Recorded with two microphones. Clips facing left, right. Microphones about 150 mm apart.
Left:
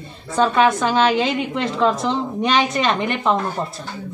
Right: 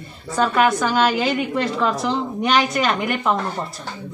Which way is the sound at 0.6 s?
Centre (ahead or behind).